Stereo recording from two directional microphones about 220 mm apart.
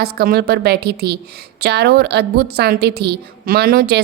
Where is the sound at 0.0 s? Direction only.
45° right (ahead or behind).